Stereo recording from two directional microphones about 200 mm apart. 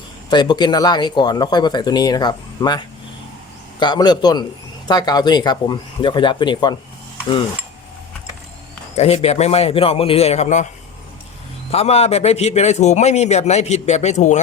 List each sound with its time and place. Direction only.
0.3 s speech: 20° left (ahead or behind)
9.0 s a man's voice: 30° left (ahead or behind)
11.7 s a man's voice: 30° left (ahead or behind)